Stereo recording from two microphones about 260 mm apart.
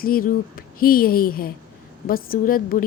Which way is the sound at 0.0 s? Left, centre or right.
Left.